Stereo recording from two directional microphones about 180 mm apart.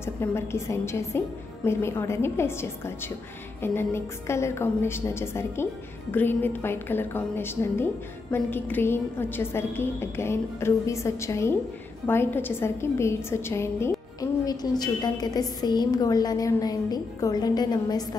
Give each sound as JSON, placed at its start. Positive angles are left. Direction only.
{"t": 0.0, "sound": "a woman's voice", "side_deg": 15}